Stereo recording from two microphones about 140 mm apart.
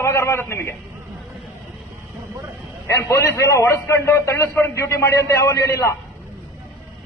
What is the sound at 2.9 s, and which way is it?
A man's voice, 20° left (ahead or behind).